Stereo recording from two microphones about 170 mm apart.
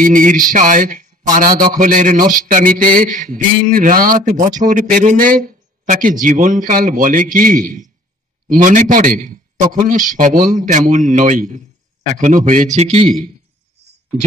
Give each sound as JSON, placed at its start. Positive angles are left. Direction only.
{"t": 0.0, "sound": "a man's voice", "side_deg": -50}